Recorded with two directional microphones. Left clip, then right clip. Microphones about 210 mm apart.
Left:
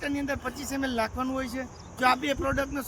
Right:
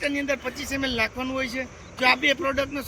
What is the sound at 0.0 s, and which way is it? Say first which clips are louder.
Speech: right 5 dB; 20° left (ahead or behind).